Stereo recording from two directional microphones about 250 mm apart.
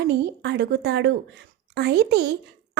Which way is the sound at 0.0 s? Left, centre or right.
Right.